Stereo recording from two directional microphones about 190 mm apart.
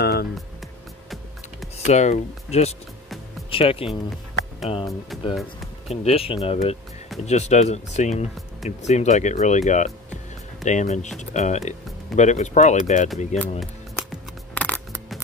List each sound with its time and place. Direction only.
0.0 s music: 60° left (ahead or behind)
1.9 s speech: 35° left (ahead or behind)
5.1 s speech: centre (ahead or behind)
5.9 s speech: 30° left (ahead or behind)
14.5 s a sound: 10° left (ahead or behind)